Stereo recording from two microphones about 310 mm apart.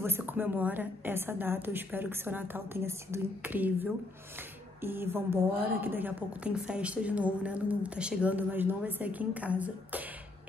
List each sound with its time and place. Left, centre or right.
0.0 s a woman's voice: centre